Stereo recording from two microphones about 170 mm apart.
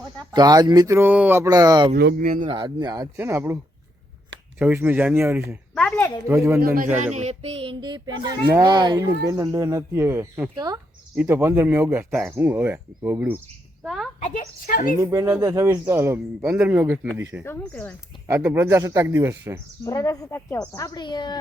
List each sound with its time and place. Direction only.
0.3 s speech: 25° right (ahead or behind)
2.0 s speech: 65° right (ahead or behind)
2.4 s a man's voice: 30° right (ahead or behind); by 5.4 s 15° right (ahead or behind)
5.7 s speech: 5° left (ahead or behind)
6.2 s a man's voice: 15° right (ahead or behind)
7.0 s a man's voice: 40° right (ahead or behind); by 10.5 s 15° right (ahead or behind)
10.5 s speech: 25° right (ahead or behind)
11.1 s a man's voice: 10° right (ahead or behind)
14.2 s speech: 50° left (ahead or behind)
14.9 s a man's voice: 20° right (ahead or behind)
17.4 s speech: 10° left (ahead or behind)
18.3 s a man's voice: 15° right (ahead or behind)
19.8 s speech: 20° left (ahead or behind)